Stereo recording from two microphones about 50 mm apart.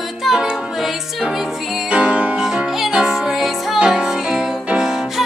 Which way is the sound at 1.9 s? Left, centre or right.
Right.